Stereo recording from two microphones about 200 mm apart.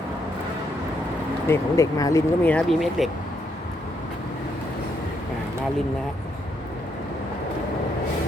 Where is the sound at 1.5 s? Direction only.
15° left (ahead or behind); by 3.0 s centre (ahead or behind).